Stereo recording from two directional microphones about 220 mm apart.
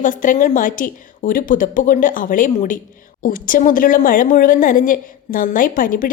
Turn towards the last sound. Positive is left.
turn(degrees=40)  # may be behind; listen again after turning